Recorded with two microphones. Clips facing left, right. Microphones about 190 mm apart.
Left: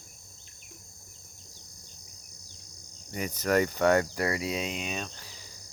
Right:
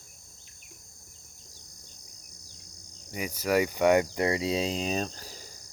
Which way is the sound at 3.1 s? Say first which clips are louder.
Even; 10° right (ahead or behind).